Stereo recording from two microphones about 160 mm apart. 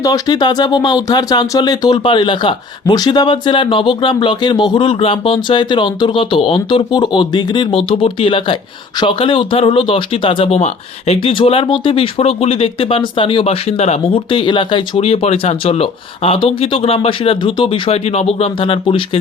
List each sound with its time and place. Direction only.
0.0 s speech: 25° left (ahead or behind)